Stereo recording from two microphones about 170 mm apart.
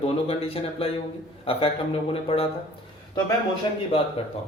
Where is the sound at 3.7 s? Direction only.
25° left (ahead or behind).